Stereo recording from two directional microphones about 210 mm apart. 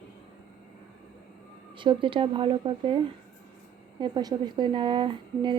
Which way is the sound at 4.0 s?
20° right (ahead or behind).